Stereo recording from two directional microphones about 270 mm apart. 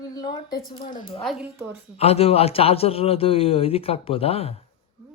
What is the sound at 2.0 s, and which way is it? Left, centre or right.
A man's voice, left.